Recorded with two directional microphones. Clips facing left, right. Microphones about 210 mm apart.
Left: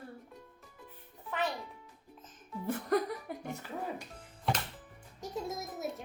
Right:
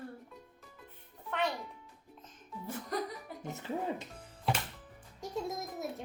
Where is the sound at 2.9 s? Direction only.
60° left (ahead or behind).